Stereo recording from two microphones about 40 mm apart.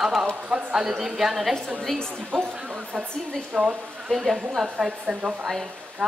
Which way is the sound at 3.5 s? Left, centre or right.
Right.